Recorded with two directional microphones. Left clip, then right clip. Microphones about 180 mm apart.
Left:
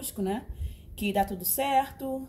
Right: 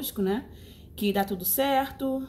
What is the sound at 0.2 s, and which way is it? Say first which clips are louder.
Speech: right 3 dB; 5° left (ahead or behind).